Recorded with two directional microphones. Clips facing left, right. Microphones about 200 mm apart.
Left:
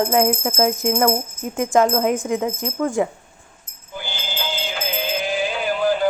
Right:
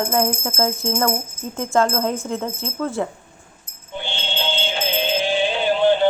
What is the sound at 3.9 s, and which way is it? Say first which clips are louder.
Music: right 2 dB; 25° right (ahead or behind).